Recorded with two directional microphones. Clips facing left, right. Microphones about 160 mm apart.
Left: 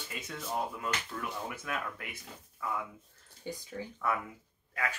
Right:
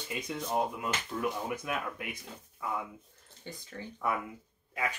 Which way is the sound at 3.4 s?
10° left (ahead or behind).